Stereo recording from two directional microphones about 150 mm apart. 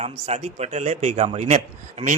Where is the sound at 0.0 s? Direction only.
45° right (ahead or behind).